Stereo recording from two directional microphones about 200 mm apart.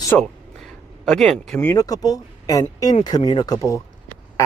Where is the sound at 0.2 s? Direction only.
Centre (ahead or behind).